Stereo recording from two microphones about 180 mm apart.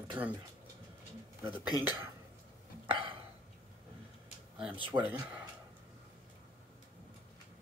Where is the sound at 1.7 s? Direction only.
20° left (ahead or behind).